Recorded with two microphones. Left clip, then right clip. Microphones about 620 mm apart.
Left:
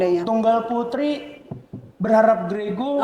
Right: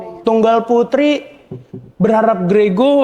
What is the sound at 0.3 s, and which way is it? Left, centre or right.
Speech, right.